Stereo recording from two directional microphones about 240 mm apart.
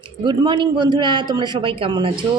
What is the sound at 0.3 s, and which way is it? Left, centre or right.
A woman's voice, centre.